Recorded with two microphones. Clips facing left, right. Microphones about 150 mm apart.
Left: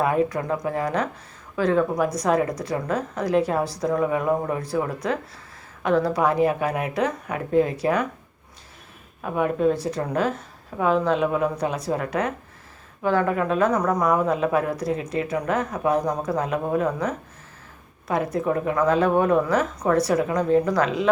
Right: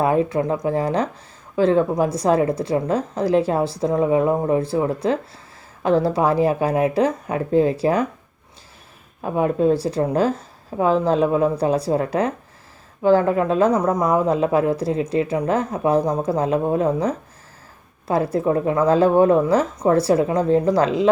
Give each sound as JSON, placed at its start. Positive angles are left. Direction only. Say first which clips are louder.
{"t": 0.0, "sound": "a woman's voice", "louder": "right 3 dB", "side_deg": -25}
{"t": 9.2, "sound": "a woman's voice", "louder": "right 3 dB", "side_deg": -30}